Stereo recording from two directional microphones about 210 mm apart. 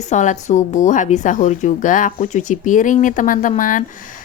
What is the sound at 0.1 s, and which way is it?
A woman's voice, 35° left (ahead or behind).